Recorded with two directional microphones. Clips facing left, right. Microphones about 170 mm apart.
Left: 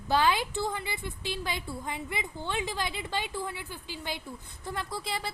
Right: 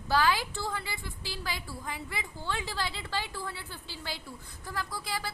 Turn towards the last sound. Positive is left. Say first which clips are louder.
# left 2 dB
turn(degrees=25)  # may be behind; listen again after turning